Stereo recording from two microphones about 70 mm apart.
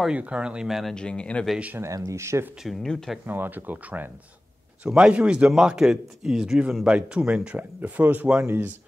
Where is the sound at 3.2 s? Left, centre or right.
Right.